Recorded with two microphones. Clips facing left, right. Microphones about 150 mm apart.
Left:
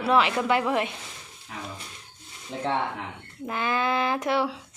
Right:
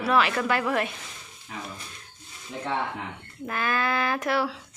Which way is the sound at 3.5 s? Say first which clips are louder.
Left 1 dB; 20° left (ahead or behind).